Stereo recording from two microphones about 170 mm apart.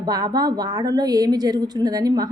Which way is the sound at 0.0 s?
25° right (ahead or behind).